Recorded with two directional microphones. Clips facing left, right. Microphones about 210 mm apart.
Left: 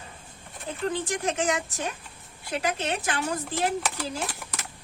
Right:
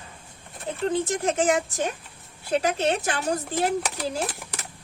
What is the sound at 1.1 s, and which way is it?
Speech, 30° right (ahead or behind).